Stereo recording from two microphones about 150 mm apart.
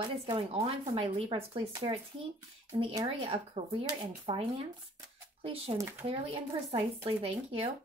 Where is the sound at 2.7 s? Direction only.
35° right (ahead or behind).